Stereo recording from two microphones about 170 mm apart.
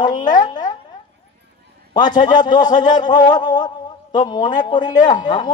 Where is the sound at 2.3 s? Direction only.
50° left (ahead or behind).